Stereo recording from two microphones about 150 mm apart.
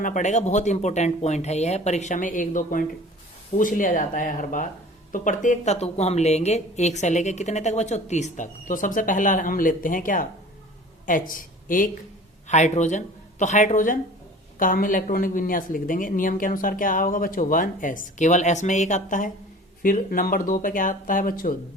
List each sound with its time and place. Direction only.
0.0 s a woman's voice: 55° left (ahead or behind)
12.5 s a woman's voice: 50° left (ahead or behind); by 21.5 s 65° left (ahead or behind)